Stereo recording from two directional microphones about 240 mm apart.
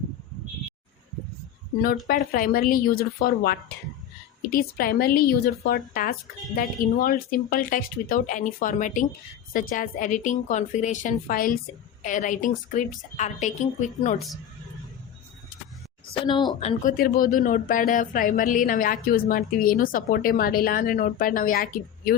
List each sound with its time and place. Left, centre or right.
2.0 s speech: left
16.2 s speech: centre; by 22.1 s left